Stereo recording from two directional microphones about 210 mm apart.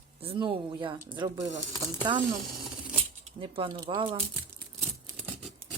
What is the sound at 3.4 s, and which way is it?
Speech, 25° right (ahead or behind).